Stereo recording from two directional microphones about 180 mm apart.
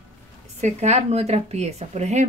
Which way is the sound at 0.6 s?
40° right (ahead or behind).